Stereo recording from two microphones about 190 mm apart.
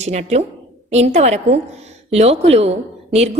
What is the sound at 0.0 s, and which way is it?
A woman's voice, 35° right (ahead or behind).